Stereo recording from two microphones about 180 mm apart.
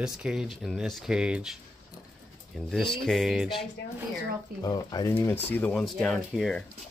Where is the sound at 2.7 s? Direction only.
Centre (ahead or behind).